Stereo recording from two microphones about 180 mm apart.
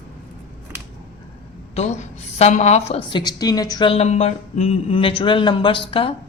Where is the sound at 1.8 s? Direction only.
40° left (ahead or behind).